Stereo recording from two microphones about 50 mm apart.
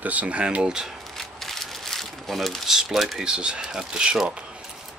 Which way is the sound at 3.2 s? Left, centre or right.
Centre.